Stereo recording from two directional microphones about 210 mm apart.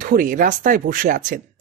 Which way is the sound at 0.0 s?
40° right (ahead or behind).